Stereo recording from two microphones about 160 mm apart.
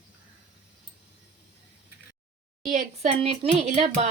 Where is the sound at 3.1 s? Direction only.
35° right (ahead or behind).